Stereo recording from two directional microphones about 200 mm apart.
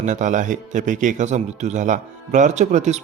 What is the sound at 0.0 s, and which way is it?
Speech, 40° right (ahead or behind).